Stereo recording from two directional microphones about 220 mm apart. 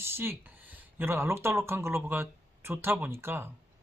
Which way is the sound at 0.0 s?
10° right (ahead or behind).